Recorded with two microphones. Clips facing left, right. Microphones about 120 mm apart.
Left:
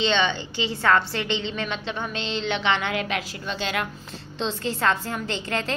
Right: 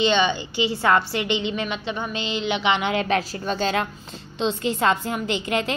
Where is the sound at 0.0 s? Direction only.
10° right (ahead or behind).